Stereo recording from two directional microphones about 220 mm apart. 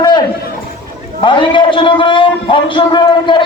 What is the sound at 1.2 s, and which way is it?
A man's voice, 20° left (ahead or behind).